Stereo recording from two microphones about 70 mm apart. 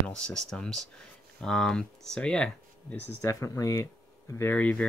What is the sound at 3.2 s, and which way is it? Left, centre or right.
Speech, left.